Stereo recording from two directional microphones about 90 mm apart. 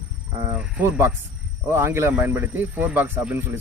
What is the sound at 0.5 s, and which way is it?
Speech, 15° right (ahead or behind).